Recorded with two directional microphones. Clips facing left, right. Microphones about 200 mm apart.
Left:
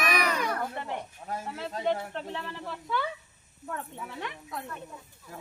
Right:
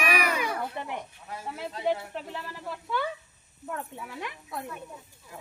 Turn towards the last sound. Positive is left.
turn(degrees=-10)  # may be behind; listen again after turning